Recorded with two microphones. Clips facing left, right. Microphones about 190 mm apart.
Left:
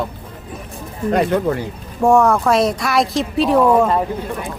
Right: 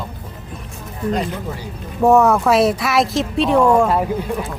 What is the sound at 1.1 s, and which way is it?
Speech, 65° left (ahead or behind).